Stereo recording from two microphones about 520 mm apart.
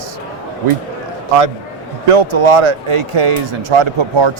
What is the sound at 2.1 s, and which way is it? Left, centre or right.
Speech, right.